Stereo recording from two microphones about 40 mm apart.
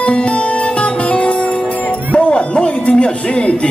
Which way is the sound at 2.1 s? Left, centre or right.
Left.